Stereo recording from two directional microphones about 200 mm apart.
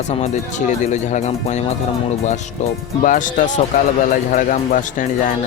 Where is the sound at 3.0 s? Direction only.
40° left (ahead or behind).